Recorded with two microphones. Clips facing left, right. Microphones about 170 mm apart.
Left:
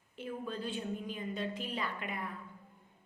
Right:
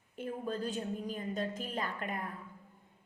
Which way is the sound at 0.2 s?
45° right (ahead or behind).